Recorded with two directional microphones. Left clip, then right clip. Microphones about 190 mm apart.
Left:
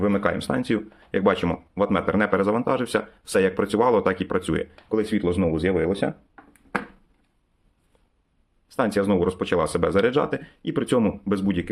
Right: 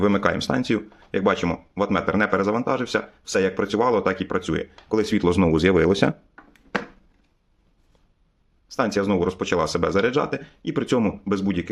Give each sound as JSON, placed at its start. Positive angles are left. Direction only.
{"t": 0.0, "sound": "speech", "side_deg": -15}
{"t": 4.9, "sound": "speech", "side_deg": -20}
{"t": 8.7, "sound": "speech", "side_deg": 0}